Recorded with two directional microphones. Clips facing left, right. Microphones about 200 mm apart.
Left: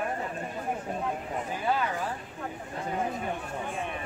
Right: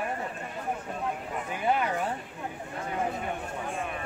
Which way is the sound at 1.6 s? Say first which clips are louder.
Right 3 dB; 20° right (ahead or behind).